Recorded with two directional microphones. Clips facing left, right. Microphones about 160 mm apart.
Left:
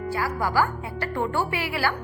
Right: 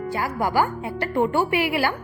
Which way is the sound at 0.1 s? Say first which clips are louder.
Right 2 dB; 20° right (ahead or behind).